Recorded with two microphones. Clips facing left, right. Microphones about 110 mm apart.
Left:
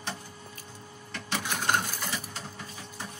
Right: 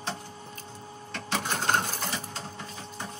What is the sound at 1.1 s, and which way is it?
Printer, 45° right (ahead or behind).